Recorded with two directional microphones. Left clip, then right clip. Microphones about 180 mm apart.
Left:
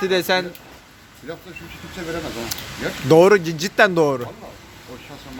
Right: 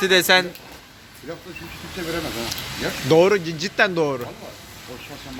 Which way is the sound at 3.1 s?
40° left (ahead or behind).